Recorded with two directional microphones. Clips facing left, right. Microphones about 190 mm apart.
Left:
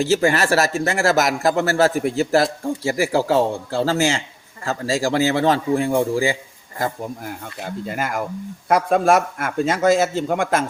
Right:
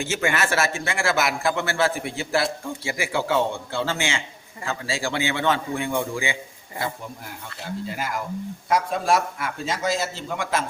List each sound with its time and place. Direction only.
0.0 s a man's voice: 35° left (ahead or behind)
7.6 s a man's voice: 55° left (ahead or behind)